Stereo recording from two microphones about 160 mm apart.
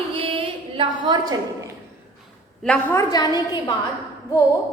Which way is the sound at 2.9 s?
20° left (ahead or behind).